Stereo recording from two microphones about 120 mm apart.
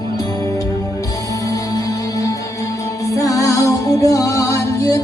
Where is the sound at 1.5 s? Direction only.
30° left (ahead or behind).